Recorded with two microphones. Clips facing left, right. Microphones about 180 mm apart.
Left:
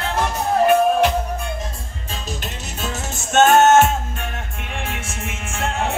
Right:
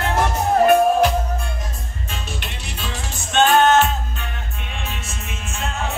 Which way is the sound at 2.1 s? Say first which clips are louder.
Left 3 dB; 40° left (ahead or behind).